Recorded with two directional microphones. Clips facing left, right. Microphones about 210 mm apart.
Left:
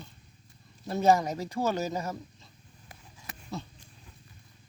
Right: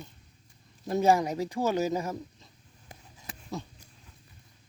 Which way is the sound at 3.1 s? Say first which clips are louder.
Right 1 dB; 15° right (ahead or behind).